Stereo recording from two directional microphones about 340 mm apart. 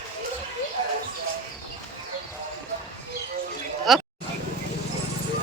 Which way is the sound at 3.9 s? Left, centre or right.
Centre.